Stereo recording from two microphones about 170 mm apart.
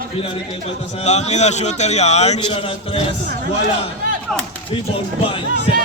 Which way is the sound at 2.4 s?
30° left (ahead or behind).